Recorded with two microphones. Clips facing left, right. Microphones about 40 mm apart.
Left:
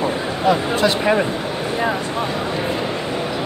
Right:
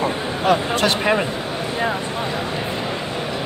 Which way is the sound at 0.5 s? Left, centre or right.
Right.